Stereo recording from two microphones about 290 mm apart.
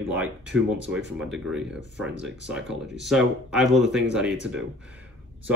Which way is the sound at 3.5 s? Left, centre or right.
Centre.